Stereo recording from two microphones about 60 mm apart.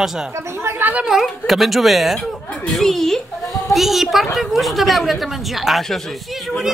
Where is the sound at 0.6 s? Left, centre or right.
Right.